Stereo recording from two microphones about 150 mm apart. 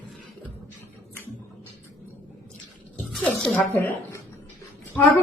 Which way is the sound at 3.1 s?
5° left (ahead or behind).